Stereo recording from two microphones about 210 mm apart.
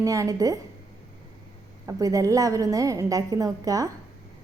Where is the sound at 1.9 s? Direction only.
15° right (ahead or behind).